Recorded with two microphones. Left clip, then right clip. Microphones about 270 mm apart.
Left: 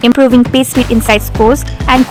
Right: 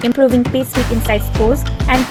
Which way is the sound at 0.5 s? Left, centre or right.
Centre.